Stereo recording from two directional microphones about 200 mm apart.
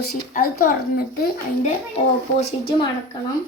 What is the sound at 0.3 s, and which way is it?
Speech, 45° left (ahead or behind).